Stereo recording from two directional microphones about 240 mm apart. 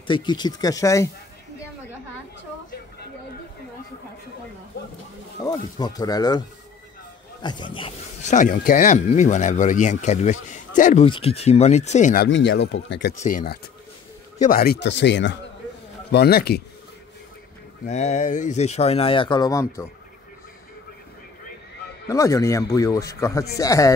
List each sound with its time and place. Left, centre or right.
0.0 s speech: centre
5.4 s speech: centre
7.4 s speech: centre
12.3 s speech: left
13.2 s a man's voice: left
17.8 s speech: left; by 19.9 s centre
22.1 s speech: centre